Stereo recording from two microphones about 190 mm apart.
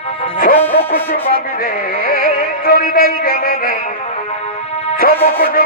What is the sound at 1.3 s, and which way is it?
Music, 50° left (ahead or behind).